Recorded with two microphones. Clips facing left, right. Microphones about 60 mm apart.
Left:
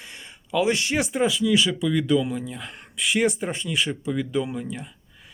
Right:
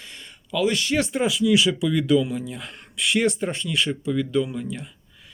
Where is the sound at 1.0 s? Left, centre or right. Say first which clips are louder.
Right 1 dB; centre.